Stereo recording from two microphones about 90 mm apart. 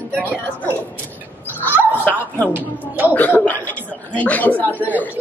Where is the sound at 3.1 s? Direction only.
20° left (ahead or behind).